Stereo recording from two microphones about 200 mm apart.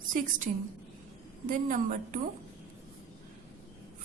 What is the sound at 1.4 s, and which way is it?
Speech, 40° right (ahead or behind).